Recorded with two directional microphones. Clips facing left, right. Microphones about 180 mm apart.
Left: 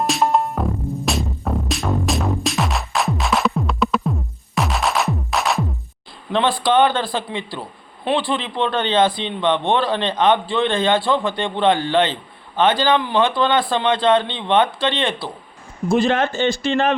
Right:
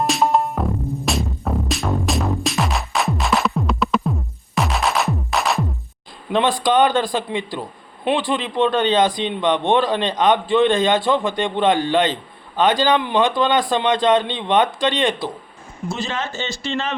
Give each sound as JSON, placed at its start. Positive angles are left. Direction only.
{"t": 0.0, "sound": "music", "side_deg": 0}
{"t": 6.6, "sound": "speech", "side_deg": -15}
{"t": 15.9, "sound": "speech", "side_deg": 55}